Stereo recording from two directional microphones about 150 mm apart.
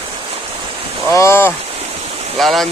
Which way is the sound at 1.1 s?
20° left (ahead or behind).